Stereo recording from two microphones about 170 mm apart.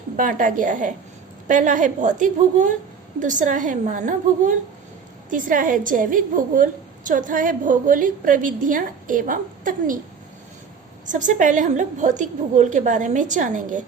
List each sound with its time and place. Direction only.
0.2 s a woman's voice: 50° right (ahead or behind)
11.1 s a woman's voice: 50° right (ahead or behind)